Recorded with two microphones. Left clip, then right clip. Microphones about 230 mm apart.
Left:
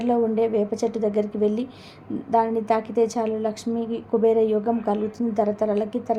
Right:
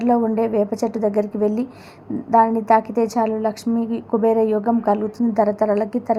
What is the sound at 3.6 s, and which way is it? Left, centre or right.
Speech, centre.